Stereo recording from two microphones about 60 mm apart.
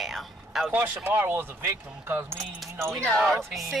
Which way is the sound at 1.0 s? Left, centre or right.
Right.